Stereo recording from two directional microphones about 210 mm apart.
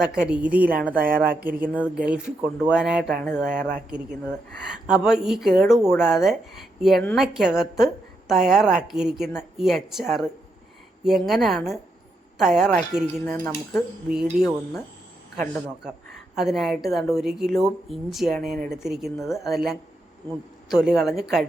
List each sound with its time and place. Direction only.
0.0 s a woman's voice: 5° right (ahead or behind)
0.9 s speech: 40° right (ahead or behind)
1.4 s a woman's voice: 10° right (ahead or behind)
5.0 s a woman's voice: centre (ahead or behind)
14.1 s a woman's voice: 5° right (ahead or behind)